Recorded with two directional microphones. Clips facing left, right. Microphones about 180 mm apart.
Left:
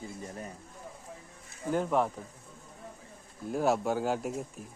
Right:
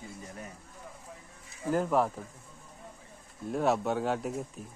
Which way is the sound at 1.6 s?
Centre (ahead or behind).